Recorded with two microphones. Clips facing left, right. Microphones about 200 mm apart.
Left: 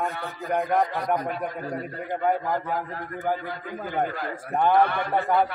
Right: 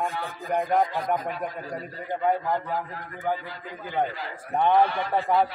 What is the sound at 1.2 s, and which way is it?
Speech, centre (ahead or behind).